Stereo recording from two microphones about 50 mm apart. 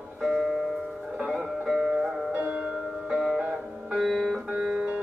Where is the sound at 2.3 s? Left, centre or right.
Right.